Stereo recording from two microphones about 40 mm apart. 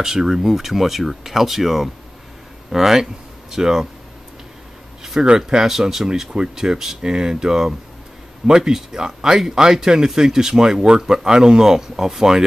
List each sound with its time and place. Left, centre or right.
0.0 s speech: centre
5.2 s speech: right